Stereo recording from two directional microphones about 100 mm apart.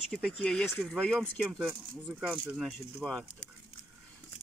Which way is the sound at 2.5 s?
Centre (ahead or behind).